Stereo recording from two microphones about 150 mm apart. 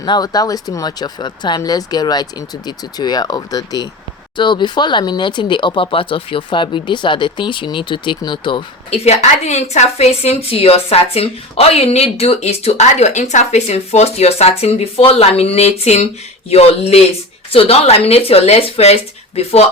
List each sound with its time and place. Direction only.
0.0 s speech: 25° left (ahead or behind)
9.0 s a woman's voice: 50° left (ahead or behind)